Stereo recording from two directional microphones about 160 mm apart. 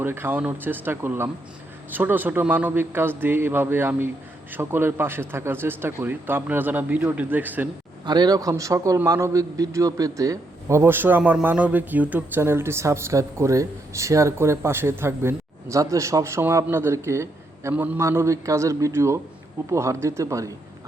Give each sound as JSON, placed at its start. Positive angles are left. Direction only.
{"t": 0.0, "sound": "a man's voice", "side_deg": -15}
{"t": 8.0, "sound": "a man's voice", "side_deg": -25}